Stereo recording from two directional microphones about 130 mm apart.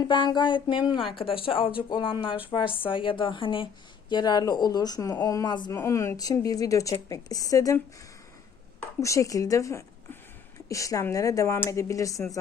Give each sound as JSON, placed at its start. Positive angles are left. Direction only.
{"t": 0.0, "sound": "a woman's voice", "side_deg": 35}
{"t": 5.8, "sound": "a woman's voice", "side_deg": 20}
{"t": 9.0, "sound": "a woman's voice", "side_deg": 25}